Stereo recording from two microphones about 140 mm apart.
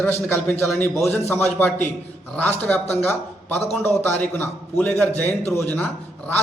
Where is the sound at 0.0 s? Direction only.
15° left (ahead or behind).